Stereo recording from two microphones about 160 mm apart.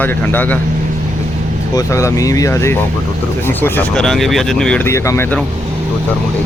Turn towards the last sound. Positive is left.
turn(degrees=15)  # may be behind; listen again after turning